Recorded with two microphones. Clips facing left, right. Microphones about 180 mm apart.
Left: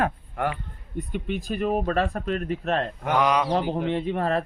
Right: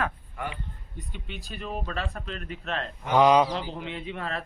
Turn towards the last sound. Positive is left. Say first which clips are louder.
# left 9 dB
turn(degrees=45)  # may be behind; listen again after turning